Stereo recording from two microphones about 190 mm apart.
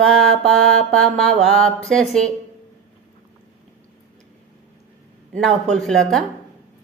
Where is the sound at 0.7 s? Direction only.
5° left (ahead or behind).